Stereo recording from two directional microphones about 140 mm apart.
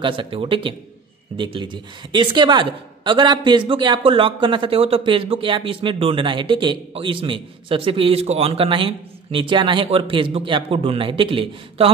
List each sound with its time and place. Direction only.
0.0 s speech: 35° right (ahead or behind)